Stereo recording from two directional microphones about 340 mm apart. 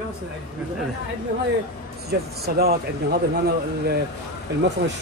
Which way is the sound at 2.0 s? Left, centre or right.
Right.